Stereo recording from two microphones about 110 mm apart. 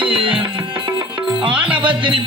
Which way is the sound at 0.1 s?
50° right (ahead or behind).